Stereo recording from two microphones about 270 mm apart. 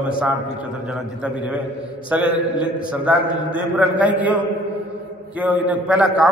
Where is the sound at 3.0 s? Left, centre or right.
Centre.